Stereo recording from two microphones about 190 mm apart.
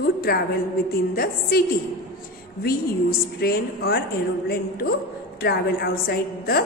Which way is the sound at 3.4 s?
55° left (ahead or behind).